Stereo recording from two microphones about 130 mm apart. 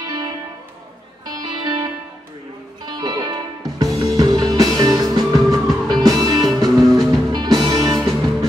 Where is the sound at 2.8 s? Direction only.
30° right (ahead or behind).